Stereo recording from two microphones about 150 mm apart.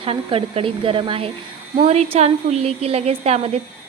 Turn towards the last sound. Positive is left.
turn(degrees=-45)  # may be behind; listen again after turning